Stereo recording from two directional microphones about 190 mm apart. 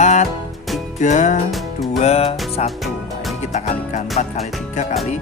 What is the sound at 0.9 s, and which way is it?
Speech, 40° left (ahead or behind).